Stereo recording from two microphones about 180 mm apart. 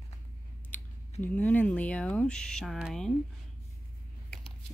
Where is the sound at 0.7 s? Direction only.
10° left (ahead or behind).